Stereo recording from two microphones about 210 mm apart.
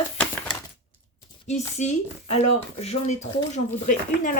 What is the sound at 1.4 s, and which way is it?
Speech, 35° left (ahead or behind).